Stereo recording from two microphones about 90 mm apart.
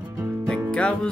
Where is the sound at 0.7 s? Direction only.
10° left (ahead or behind).